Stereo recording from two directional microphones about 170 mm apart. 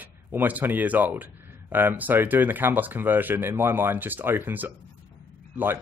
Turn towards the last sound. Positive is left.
turn(degrees=-10)  # may be behind; listen again after turning